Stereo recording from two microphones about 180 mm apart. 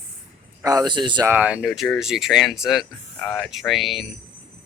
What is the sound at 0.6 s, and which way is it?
Speech, 20° right (ahead or behind).